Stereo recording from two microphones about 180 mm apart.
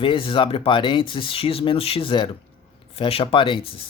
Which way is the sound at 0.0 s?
30° left (ahead or behind).